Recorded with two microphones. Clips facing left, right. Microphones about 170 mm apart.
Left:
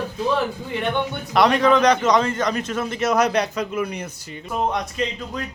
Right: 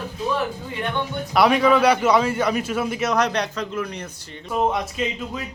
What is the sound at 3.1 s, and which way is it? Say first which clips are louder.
Speech: left 6 dB; 5° left (ahead or behind).